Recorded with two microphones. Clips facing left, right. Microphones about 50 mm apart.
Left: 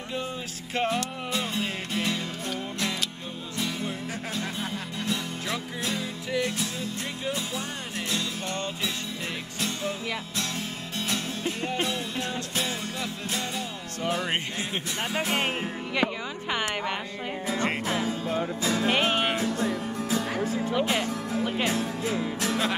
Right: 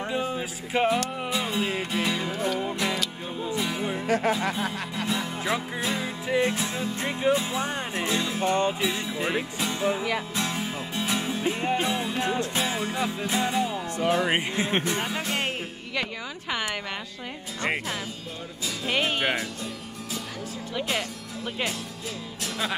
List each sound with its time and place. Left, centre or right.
0.7 s music: centre
3.5 s music: centre
14.0 s speech: centre
17.8 s music: left
18.9 s music: centre
19.4 s music: left
21.6 s speech: left